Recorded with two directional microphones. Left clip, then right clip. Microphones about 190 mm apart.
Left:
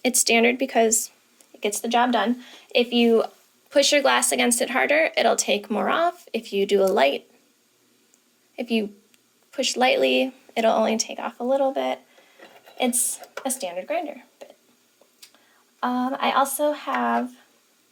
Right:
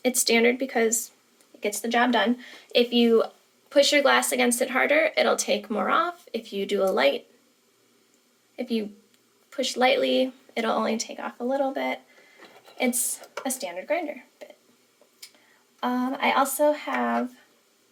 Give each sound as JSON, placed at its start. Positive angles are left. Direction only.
{"t": 0.0, "sound": "speech", "side_deg": 30}
{"t": 3.7, "sound": "speech", "side_deg": 35}
{"t": 8.5, "sound": "speech", "side_deg": 35}
{"t": 15.8, "sound": "speech", "side_deg": 20}